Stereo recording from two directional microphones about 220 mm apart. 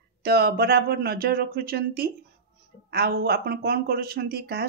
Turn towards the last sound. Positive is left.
turn(degrees=-45)  # may be behind; listen again after turning